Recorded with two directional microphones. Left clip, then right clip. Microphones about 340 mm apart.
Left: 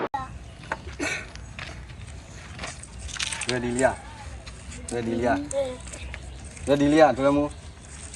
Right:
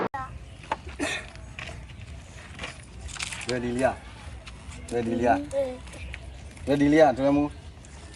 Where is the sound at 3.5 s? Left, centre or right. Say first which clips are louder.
Left 2 dB; centre.